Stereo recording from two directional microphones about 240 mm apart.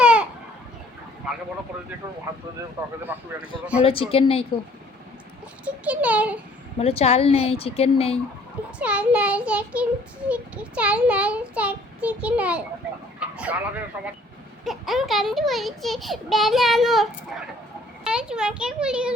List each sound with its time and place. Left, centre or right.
0.0 s a sound: centre
1.3 s speech: centre
2.6 s speech: centre
3.8 s a woman's voice: left
5.6 s a child's voice: centre
6.7 s a woman's voice: left
8.8 s a child's voice: centre
13.1 s vehicle: centre
14.6 s a child's voice: centre